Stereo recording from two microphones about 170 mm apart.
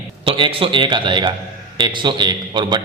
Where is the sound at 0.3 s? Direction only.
30° right (ahead or behind).